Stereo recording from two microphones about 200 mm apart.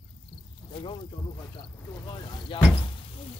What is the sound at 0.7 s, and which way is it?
Snake, 25° left (ahead or behind).